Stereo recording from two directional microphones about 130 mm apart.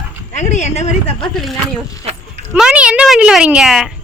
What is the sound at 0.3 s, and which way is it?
Speech, 65° left (ahead or behind).